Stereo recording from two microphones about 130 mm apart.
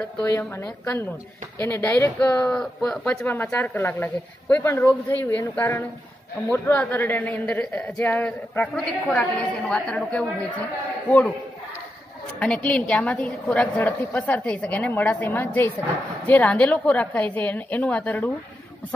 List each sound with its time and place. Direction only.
0.2 s a woman's voice: 20° left (ahead or behind)
6.5 s a woman's voice: 15° left (ahead or behind)
12.4 s a woman's voice: 10° left (ahead or behind)